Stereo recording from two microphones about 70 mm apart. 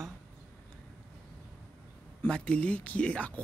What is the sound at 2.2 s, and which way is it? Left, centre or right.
Speech, centre.